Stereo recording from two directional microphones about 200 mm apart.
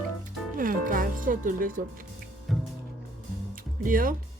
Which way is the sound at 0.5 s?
45° right (ahead or behind).